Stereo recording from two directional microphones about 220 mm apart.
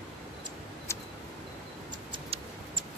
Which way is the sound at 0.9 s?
10° left (ahead or behind).